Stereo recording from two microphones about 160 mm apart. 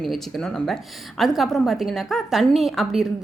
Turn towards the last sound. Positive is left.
turn(degrees=0)  # may be behind; listen again after turning